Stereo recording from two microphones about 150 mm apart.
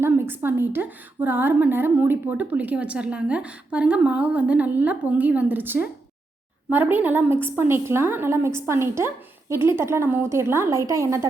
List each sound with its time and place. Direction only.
0.0 s a woman's voice: 15° right (ahead or behind)